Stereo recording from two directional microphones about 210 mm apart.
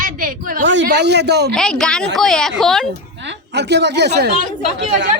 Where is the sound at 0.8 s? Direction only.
55° right (ahead or behind).